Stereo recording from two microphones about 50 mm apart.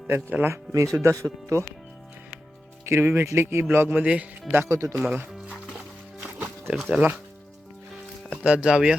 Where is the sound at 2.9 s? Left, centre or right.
Right.